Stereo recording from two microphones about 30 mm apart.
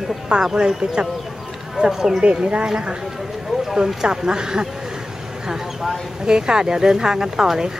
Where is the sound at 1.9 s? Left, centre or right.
Centre.